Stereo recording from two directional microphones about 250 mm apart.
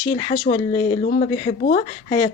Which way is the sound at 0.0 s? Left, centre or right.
Left.